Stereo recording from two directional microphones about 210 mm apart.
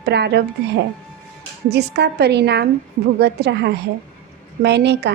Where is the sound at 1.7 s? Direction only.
50° right (ahead or behind).